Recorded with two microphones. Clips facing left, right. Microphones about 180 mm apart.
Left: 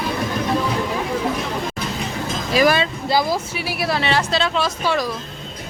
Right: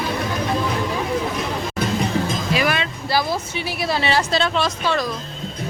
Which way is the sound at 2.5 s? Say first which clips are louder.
Left 7 dB; 35° left (ahead or behind).